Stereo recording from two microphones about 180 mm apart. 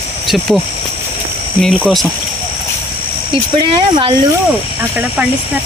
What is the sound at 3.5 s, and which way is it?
Speech, 25° right (ahead or behind).